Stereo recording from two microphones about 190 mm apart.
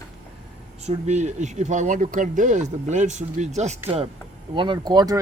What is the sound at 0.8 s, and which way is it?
Speech, 35° right (ahead or behind).